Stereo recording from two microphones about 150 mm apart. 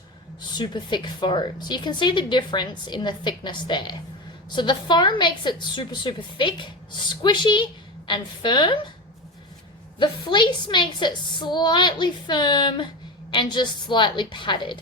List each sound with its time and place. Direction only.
0.4 s a woman's voice: 30° left (ahead or behind)
10.0 s a woman's voice: 30° left (ahead or behind)